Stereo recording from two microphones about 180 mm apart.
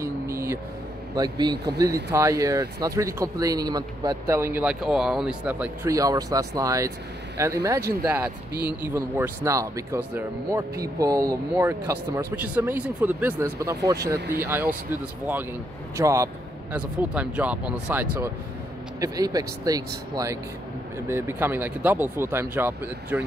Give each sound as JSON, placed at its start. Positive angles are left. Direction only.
{"t": 0.0, "sound": "vehicle", "side_deg": -15}
{"t": 1.1, "sound": "speech", "side_deg": -20}
{"t": 16.0, "sound": "speech", "side_deg": -15}
{"t": 18.9, "sound": "speech", "side_deg": -20}